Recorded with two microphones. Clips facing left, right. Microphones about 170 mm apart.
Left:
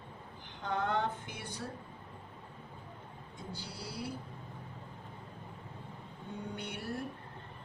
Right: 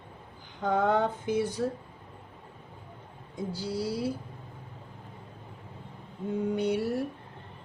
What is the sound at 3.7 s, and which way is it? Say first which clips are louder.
Speech: right 14 dB; 90° right.